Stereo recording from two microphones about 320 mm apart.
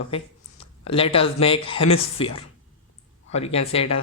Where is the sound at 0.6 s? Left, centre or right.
Centre.